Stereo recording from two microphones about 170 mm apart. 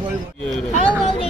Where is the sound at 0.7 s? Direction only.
35° left (ahead or behind).